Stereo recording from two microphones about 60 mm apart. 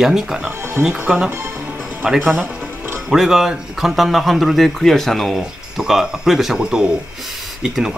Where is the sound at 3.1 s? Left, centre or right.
Centre.